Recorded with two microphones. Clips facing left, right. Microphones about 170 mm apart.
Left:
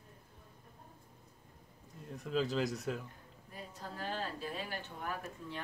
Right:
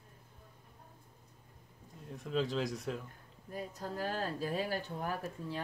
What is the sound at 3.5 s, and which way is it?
Speech, 45° right (ahead or behind).